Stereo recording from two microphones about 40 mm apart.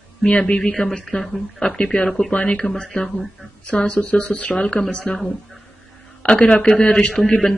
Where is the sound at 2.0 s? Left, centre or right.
Centre.